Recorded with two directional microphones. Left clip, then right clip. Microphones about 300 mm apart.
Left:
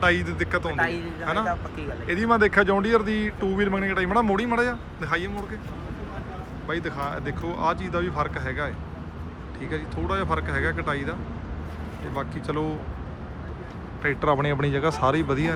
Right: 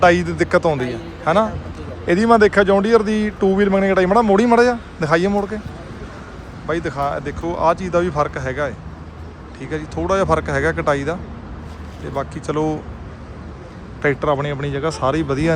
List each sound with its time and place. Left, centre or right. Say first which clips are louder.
0.0 s speech: right 9 dB; centre
6.7 s speech: right 8 dB; centre
14.0 s speech: right 5 dB; centre